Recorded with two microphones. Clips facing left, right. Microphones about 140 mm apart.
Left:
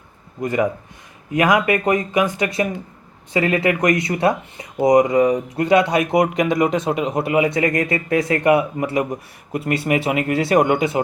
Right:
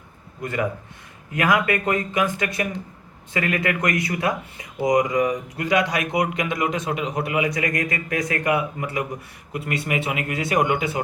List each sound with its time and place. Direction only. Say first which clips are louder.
1.3 s speech: left 4 dB; 20° left (ahead or behind)
6.1 s speech: left 6 dB; 40° left (ahead or behind)
6.6 s speech: left 6 dB; 25° left (ahead or behind)